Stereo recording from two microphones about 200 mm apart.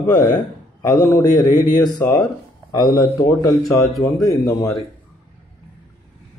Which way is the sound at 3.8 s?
15° left (ahead or behind).